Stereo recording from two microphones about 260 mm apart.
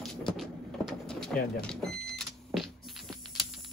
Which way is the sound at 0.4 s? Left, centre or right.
Centre.